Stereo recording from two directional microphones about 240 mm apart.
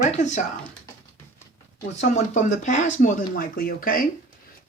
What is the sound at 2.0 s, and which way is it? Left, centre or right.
Speech, left.